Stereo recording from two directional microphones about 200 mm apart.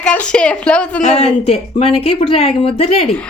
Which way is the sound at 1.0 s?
30° left (ahead or behind).